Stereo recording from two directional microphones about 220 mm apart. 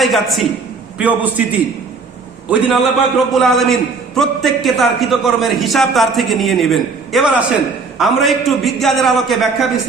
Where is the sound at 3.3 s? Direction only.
Centre (ahead or behind).